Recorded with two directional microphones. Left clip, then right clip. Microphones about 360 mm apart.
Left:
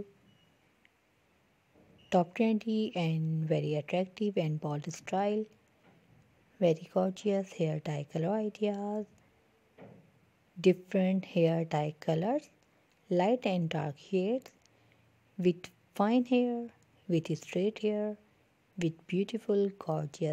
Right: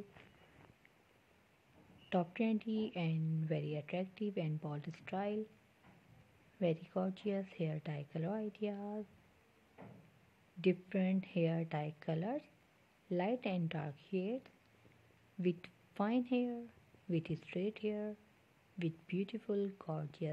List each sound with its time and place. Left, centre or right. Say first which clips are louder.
2.0 s speech: left 9 dB; left
6.6 s speech: left 9 dB; left
10.6 s speech: left 8 dB; left